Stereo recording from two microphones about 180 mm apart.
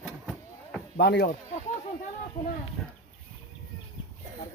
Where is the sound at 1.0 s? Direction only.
70° left (ahead or behind).